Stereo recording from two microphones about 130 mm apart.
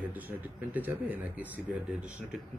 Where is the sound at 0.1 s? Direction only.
15° right (ahead or behind).